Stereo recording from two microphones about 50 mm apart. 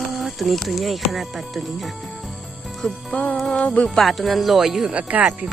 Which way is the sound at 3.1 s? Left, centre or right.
Centre.